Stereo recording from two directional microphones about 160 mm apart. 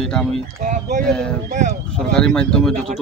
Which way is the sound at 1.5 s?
50° right (ahead or behind).